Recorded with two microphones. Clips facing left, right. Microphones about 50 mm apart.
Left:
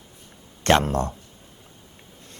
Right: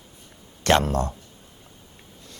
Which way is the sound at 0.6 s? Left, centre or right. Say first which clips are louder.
Left 1 dB; left.